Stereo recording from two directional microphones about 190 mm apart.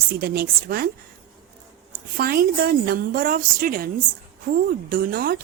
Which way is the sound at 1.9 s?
55° right (ahead or behind).